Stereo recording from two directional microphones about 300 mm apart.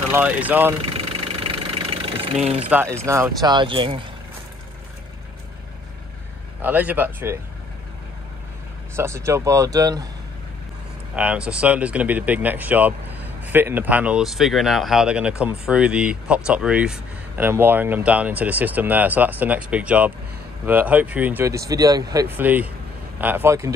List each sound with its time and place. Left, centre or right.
0.1 s speech: centre
0.8 s engine: centre
2.7 s speech: centre
6.6 s speech: centre
8.9 s speech: centre
11.1 s speech: centre